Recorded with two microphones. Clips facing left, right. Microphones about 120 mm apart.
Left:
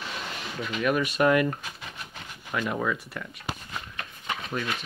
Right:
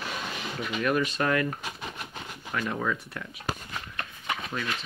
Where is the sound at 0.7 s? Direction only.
5° left (ahead or behind).